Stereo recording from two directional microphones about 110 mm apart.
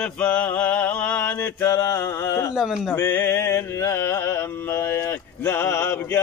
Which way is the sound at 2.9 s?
20° left (ahead or behind).